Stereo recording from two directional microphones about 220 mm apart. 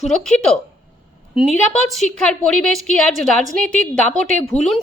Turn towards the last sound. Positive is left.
turn(degrees=5)  # may be behind; listen again after turning